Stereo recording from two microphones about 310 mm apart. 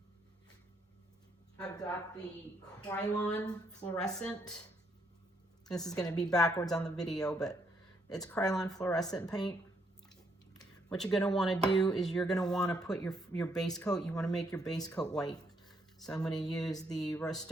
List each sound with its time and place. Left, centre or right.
1.5 s a woman's voice: centre
5.6 s a woman's voice: centre
5.9 s a woman's voice: centre
10.5 s a sound: centre
10.9 s speech: centre
12.5 s a woman's voice: centre
12.8 s speech: centre
14.8 s a sound: centre
16.0 s speech: centre
16.3 s a woman's voice: centre